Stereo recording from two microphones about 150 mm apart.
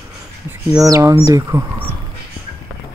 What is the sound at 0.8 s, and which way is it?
Speech, 20° right (ahead or behind).